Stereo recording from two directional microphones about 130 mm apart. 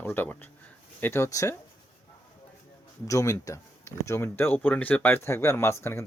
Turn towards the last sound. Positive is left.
turn(degrees=20)  # may be behind; listen again after turning